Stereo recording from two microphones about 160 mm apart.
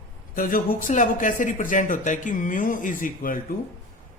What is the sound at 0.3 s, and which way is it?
Speech, 60° left (ahead or behind).